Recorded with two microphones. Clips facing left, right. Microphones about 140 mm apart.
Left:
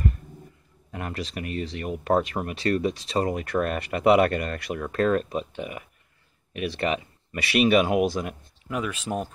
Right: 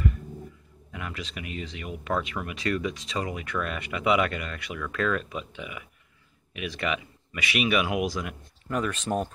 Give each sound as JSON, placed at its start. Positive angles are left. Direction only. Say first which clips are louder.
{"t": 0.9, "sound": "speech", "louder": "left 5 dB", "side_deg": 45}
{"t": 8.6, "sound": "speech", "louder": "right 1 dB", "side_deg": 5}